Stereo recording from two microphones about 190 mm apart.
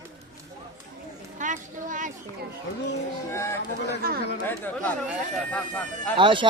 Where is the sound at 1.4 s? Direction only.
40° right (ahead or behind).